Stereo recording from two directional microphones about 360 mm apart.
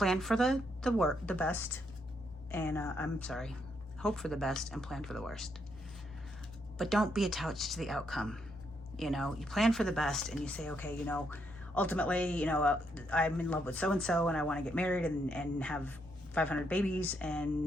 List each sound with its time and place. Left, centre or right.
0.0 s a woman's voice: centre
6.7 s speech: centre